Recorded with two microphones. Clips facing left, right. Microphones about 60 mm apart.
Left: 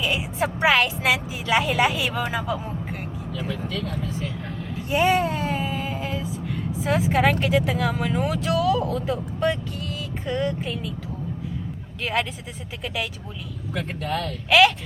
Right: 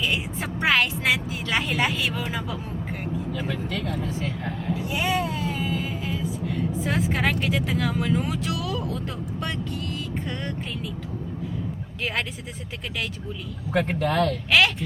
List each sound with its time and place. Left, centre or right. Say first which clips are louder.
0.0 s speech: left 3 dB; centre
3.3 s speech: even; right
4.9 s a sound: left 7 dB; left
5.8 s speech: left 1 dB; centre
13.7 s speech: right 6 dB; right